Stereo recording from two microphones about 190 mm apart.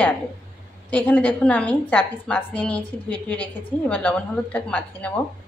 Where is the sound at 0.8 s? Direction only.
5° left (ahead or behind).